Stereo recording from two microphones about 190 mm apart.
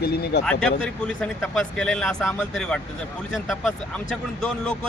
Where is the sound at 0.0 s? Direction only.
55° left (ahead or behind).